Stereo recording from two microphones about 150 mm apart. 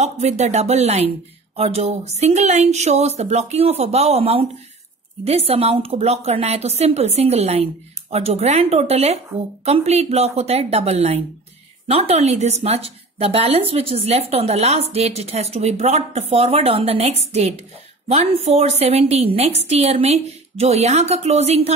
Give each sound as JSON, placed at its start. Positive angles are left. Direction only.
{"t": 0.0, "sound": "a woman's voice", "side_deg": -45}